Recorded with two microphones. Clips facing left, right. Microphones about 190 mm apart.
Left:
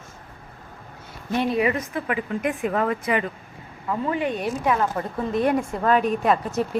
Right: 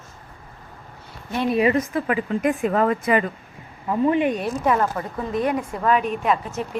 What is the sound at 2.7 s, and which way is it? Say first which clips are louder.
Speech: right 3 dB; 40° right (ahead or behind).